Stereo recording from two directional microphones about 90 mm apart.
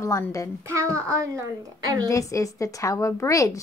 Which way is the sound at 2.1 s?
35° left (ahead or behind).